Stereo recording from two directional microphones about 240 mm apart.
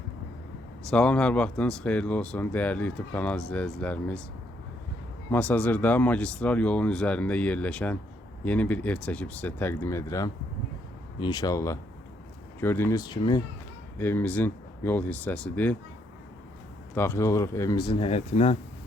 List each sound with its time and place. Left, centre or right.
0.9 s speech: centre
5.3 s speech: centre
14.0 s speech: centre
16.9 s speech: centre; by 18.5 s left